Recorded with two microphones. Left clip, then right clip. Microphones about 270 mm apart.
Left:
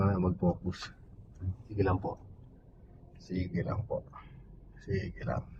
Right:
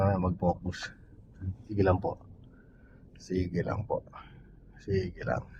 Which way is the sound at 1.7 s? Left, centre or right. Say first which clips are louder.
Right 5 dB; right.